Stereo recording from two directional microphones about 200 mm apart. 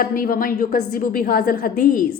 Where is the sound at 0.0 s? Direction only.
45° left (ahead or behind).